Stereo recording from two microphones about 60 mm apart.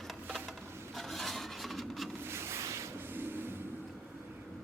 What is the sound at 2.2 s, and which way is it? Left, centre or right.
Rub, right.